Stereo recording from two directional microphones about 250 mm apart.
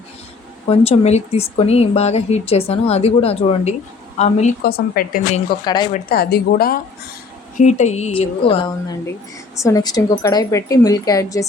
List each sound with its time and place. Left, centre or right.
0.7 s speech: left
5.6 s a woman's voice: centre
5.9 s a woman's voice: left; by 11.4 s centre